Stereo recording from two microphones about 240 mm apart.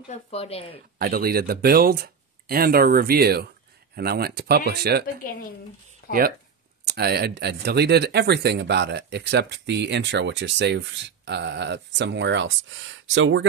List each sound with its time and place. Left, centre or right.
0.1 s speech: left
0.9 s speech: right
5.2 s a woman's voice: left
6.0 s a sound: left
6.9 s speech: right